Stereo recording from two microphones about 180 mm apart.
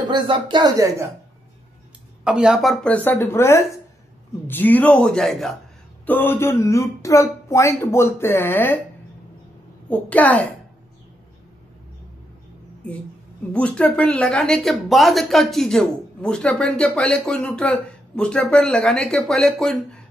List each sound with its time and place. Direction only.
0.0 s speech: 25° right (ahead or behind)
2.2 s speech: 5° right (ahead or behind); by 8.8 s 10° left (ahead or behind)
9.8 s speech: 10° left (ahead or behind)
13.5 s speech: 5° left (ahead or behind)